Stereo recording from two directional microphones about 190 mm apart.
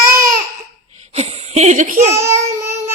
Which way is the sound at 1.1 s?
35° right (ahead or behind).